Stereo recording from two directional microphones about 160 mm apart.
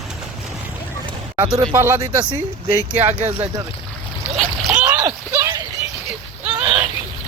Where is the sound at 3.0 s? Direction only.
10° right (ahead or behind).